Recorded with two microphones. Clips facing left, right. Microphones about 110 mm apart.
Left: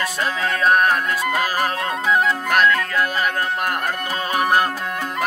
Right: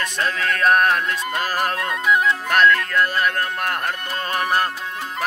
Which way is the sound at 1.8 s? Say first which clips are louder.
Even; 30° left (ahead or behind).